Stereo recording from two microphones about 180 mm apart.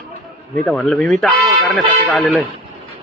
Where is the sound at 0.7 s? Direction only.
5° left (ahead or behind).